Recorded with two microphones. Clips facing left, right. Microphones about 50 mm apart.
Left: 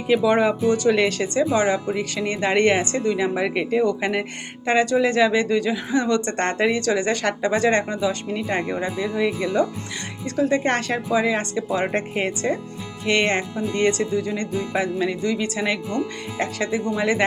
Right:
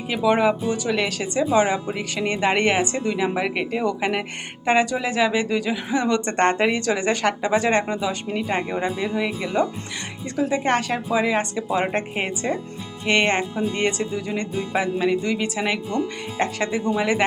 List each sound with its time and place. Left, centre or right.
0.1 s speech: centre
1.5 s speech: right; by 4.3 s centre
4.6 s speech: centre
10.3 s speech: centre
11.1 s speech: right
16.6 s speech: right
17.0 s speech: centre